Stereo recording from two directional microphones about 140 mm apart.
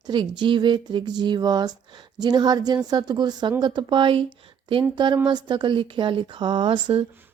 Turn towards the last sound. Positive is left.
turn(degrees=-35)  # may be behind; listen again after turning